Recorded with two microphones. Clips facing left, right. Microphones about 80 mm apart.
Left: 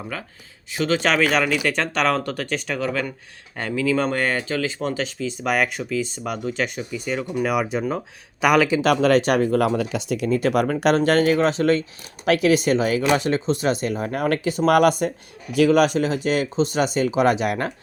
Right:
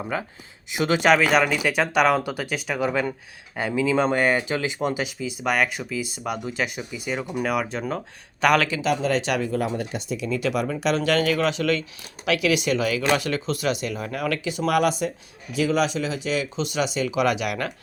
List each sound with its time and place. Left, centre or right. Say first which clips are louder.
0.7 s speech: right 2 dB; centre
3.5 s speech: right 1 dB; centre
3.8 s speech: even; centre
5.5 s speech: left 1 dB; centre
7.4 s speech: left 4 dB; centre
8.8 s speech: left 6 dB; left
9.2 s speech: left 6 dB; left
9.6 s speech: left 6 dB; left
10.2 s speech: left 5 dB; left